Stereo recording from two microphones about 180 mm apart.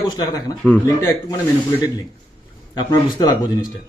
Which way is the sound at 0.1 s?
20° left (ahead or behind).